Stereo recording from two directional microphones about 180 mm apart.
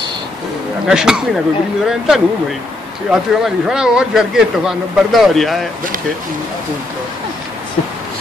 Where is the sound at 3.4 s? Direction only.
5° right (ahead or behind).